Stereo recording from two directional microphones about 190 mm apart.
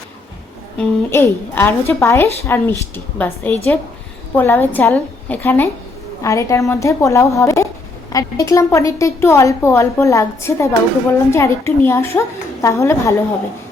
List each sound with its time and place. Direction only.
0.8 s a woman's voice: 10° left (ahead or behind)